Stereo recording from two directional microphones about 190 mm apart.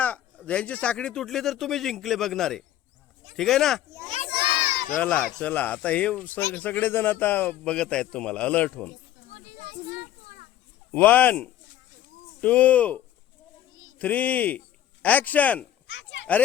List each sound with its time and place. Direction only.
0.0 s speech: 5° left (ahead or behind)
4.3 s crowd: 30° right (ahead or behind)
4.8 s speech: 5° left (ahead or behind)
10.9 s speech: 10° left (ahead or behind)
14.0 s speech: 10° left (ahead or behind)
15.9 s children playing: 70° left (ahead or behind)